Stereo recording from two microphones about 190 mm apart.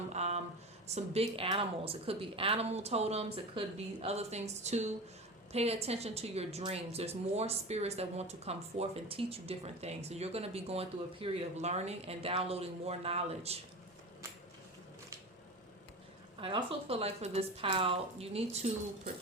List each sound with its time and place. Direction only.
0.1 s a sound: 35° right (ahead or behind)
0.9 s a woman's voice: 30° right (ahead or behind)
16.4 s a woman's voice: 25° right (ahead or behind)